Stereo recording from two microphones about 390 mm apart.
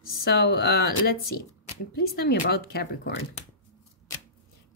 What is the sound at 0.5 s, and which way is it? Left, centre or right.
Speech, left.